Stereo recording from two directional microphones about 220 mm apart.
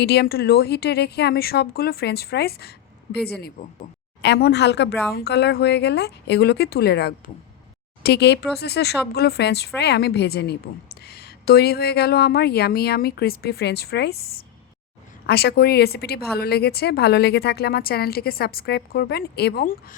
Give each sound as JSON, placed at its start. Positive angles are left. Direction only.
{"t": 0.0, "sound": "speech", "side_deg": 45}